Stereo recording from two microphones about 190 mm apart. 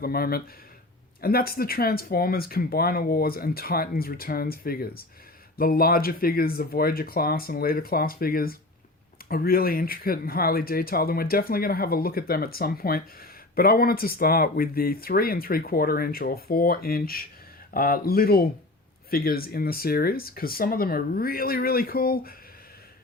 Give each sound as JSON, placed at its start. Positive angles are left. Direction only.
{"t": 0.0, "sound": "speech", "side_deg": 50}